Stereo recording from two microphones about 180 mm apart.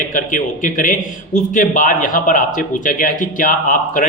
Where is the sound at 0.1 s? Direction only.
45° left (ahead or behind).